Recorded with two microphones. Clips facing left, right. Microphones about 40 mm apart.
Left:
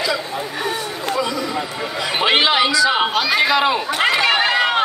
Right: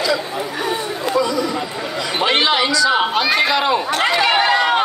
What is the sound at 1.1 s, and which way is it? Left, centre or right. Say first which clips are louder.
Speech: right 4 dB; centre.